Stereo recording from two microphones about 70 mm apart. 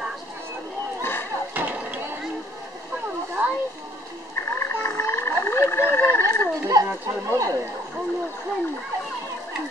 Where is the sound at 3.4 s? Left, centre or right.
Right.